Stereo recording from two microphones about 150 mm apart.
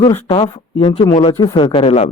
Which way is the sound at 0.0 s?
35° left (ahead or behind).